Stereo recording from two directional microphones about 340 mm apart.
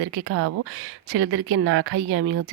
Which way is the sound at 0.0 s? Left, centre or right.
Right.